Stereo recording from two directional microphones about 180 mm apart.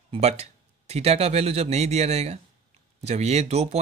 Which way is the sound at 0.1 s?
35° right (ahead or behind).